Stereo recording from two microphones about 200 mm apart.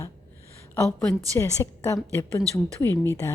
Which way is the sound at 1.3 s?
15° left (ahead or behind).